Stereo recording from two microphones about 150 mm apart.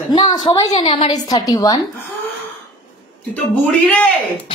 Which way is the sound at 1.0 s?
25° left (ahead or behind).